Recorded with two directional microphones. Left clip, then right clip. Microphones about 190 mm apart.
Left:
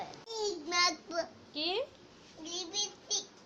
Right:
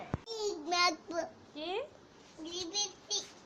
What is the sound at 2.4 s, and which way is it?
Child singing, 15° left (ahead or behind).